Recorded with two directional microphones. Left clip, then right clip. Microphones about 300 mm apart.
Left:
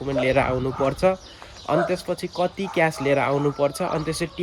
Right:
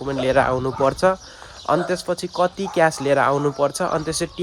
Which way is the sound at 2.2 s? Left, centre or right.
Centre.